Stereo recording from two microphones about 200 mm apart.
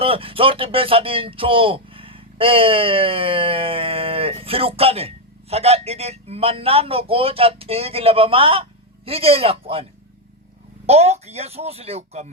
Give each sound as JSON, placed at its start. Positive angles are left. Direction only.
{"t": 0.0, "sound": "speech", "side_deg": -25}
{"t": 10.8, "sound": "speech", "side_deg": -30}